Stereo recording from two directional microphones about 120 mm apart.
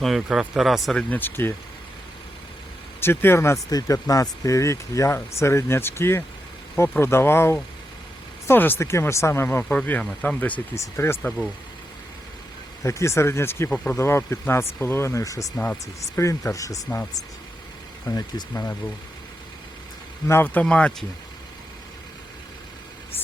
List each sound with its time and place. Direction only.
0.0 s speech: centre (ahead or behind)
1.1 s speech: 15° left (ahead or behind)
3.0 s speech: 20° left (ahead or behind)
10.8 s speech: 25° left (ahead or behind)
12.8 s speech: 25° left (ahead or behind)
15.5 s speech: 15° left (ahead or behind)
16.0 s speech: 25° left (ahead or behind)
18.0 s speech: 30° left (ahead or behind)
20.2 s speech: 20° left (ahead or behind)